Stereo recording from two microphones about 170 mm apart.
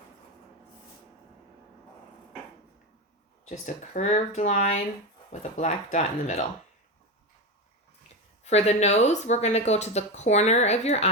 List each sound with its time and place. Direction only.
3.4 s speech: 45° left (ahead or behind)
8.4 s speech: 40° left (ahead or behind)